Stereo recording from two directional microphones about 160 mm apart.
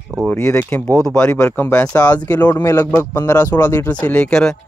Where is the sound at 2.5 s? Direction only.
20° left (ahead or behind); by 4.5 s 5° left (ahead or behind).